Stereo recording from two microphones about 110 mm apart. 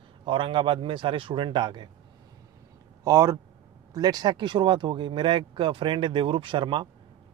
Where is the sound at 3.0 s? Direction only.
30° right (ahead or behind).